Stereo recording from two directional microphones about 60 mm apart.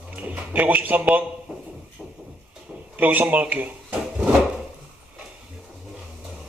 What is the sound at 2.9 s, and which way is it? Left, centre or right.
Speech, right.